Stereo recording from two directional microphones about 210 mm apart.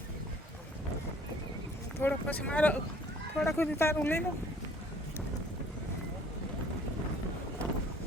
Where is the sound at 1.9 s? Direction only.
10° left (ahead or behind).